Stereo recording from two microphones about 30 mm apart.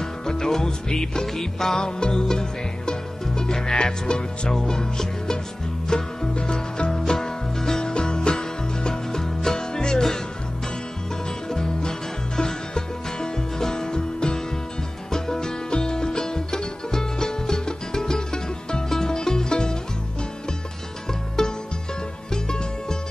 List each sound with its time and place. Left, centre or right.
0.0 s music: left
1.2 s music: centre
1.8 s music: left
7.1 s music: centre
7.8 s music: left
11.2 s music: left
21.1 s music: centre